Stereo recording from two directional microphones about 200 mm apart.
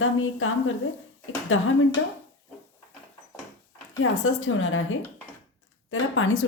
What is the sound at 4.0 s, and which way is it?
A woman's voice, 90° left.